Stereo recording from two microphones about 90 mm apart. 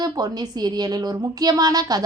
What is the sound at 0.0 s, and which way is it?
A woman's voice, 50° right (ahead or behind).